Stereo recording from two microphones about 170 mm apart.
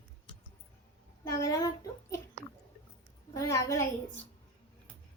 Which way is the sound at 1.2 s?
20° left (ahead or behind).